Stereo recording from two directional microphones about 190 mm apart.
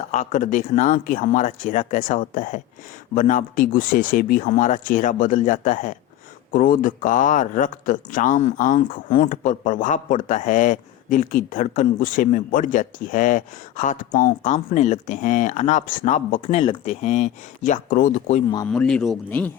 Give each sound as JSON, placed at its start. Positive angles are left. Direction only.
{"t": 0.1, "sound": "speech", "side_deg": 45}
{"t": 18.7, "sound": "speech", "side_deg": 5}